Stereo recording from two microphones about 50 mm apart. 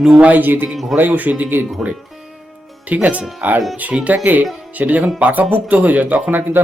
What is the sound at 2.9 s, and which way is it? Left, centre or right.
Speech, right.